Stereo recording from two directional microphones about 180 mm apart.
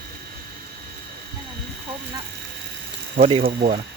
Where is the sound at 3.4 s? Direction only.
45° right (ahead or behind).